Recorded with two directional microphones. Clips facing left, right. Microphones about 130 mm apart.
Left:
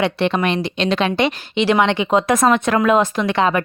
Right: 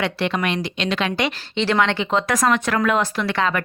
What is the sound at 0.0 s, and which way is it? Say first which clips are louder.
A woman's voice: left 4 dB; 25° left (ahead or behind).